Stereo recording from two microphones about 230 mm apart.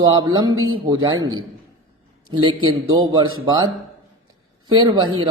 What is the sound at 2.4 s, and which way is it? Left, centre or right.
Speech, centre.